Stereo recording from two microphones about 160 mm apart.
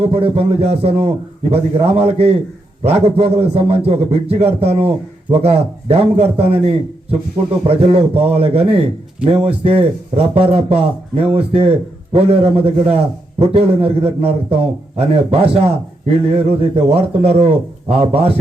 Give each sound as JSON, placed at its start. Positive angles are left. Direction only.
{"t": 0.0, "sound": "a man's voice", "side_deg": -35}